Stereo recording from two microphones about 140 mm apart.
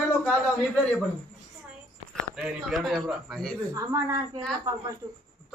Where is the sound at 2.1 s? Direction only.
Centre (ahead or behind).